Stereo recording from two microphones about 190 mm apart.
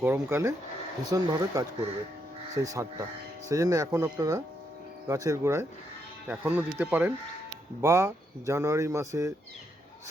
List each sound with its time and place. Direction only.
0.0 s speech: 10° right (ahead or behind)